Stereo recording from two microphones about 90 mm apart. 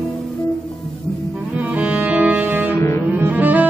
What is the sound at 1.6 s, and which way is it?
Cello, 15° right (ahead or behind).